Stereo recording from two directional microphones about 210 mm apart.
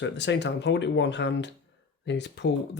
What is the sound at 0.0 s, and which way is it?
Speech, 55° left (ahead or behind).